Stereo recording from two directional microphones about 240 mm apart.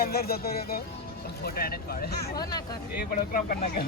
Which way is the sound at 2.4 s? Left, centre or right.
Centre.